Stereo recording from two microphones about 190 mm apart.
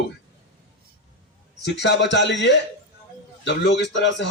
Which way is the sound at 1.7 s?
65° left (ahead or behind).